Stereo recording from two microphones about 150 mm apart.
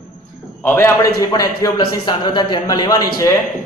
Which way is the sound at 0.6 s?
15° left (ahead or behind).